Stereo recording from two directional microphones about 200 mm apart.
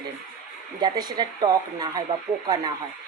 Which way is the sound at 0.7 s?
20° right (ahead or behind).